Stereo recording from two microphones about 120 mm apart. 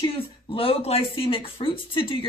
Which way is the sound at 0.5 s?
50° left (ahead or behind).